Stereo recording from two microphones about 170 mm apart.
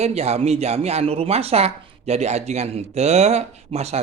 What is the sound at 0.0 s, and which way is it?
A man's voice, 40° right (ahead or behind).